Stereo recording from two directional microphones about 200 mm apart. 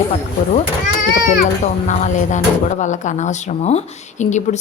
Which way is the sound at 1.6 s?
35° left (ahead or behind).